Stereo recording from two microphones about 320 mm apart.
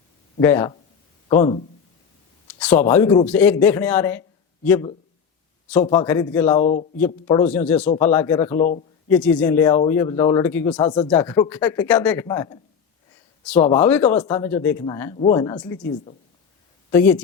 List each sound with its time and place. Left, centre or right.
0.3 s speech: centre
6.6 s speech: left
7.3 s speech: centre
8.5 s speech: left
9.0 s speech: centre
16.9 s speech: centre